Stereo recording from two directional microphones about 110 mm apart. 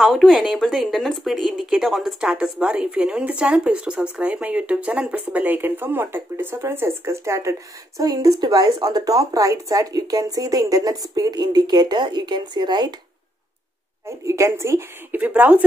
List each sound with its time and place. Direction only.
0.0 s speech: centre (ahead or behind); by 12.9 s 40° right (ahead or behind)
14.0 s a woman's voice: 25° right (ahead or behind)